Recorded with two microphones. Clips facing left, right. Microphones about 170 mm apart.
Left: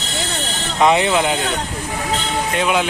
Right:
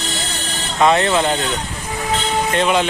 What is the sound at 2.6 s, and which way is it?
Speech, 5° left (ahead or behind).